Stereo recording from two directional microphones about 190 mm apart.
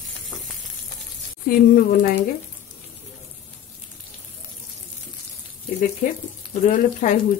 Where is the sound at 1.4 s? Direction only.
50° left (ahead or behind).